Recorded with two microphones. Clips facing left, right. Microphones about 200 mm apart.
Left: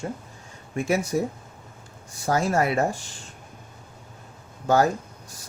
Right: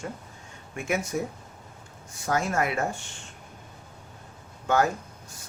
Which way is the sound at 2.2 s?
35° left (ahead or behind).